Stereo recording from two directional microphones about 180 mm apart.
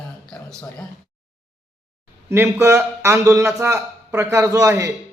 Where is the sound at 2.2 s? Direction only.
15° right (ahead or behind).